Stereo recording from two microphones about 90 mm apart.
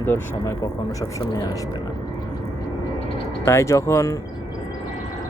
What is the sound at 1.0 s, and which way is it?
Speech, 40° left (ahead or behind).